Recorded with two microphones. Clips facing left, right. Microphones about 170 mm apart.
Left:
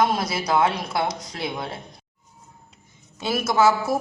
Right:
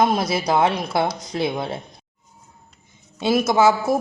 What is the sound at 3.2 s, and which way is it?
Speech, 20° right (ahead or behind).